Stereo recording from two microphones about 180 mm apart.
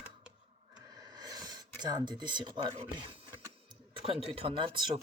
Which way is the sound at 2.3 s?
25° right (ahead or behind).